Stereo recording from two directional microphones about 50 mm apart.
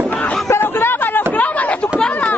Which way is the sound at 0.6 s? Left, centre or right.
Left.